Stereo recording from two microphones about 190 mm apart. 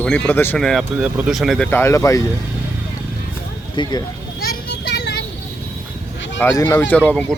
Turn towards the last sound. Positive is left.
turn(degrees=5)  # may be behind; listen again after turning